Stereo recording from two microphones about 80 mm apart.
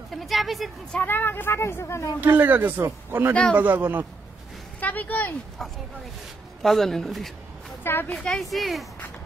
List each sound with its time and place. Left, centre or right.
0.1 s speech: centre
1.0 s speech: left
2.1 s speech: right
4.7 s speech: left
6.6 s speech: centre
7.8 s a woman's voice: left
8.1 s speech: centre